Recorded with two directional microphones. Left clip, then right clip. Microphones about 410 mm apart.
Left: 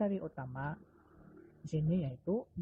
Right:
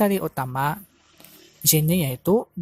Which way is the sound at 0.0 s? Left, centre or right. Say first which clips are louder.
Right 15 dB; right.